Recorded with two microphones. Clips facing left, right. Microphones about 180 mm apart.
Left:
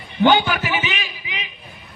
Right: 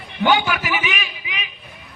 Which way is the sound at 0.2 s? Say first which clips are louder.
Left 3 dB; 30° left (ahead or behind).